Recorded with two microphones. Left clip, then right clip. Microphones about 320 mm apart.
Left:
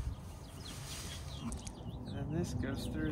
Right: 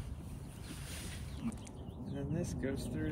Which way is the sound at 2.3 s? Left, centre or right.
Centre.